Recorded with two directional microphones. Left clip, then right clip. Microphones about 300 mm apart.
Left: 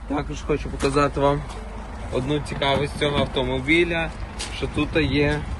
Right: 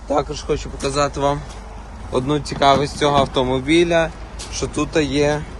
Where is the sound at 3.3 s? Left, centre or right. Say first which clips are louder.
Right 4 dB; right.